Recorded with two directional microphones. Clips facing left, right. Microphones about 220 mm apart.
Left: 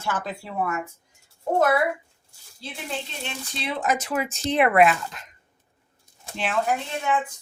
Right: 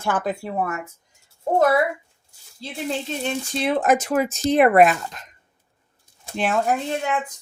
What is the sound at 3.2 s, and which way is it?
Speech, 50° right (ahead or behind).